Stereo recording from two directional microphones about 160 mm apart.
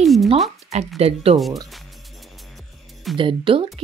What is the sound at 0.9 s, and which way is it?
Speech, 40° right (ahead or behind).